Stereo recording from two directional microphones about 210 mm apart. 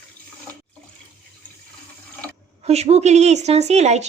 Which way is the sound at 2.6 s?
30° right (ahead or behind).